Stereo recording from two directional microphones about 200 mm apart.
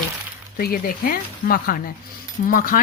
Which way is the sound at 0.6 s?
45° left (ahead or behind).